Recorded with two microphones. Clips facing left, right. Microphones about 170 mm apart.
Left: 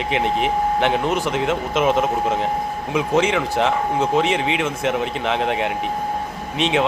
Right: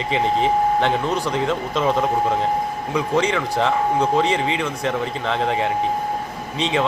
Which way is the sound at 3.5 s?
20° left (ahead or behind).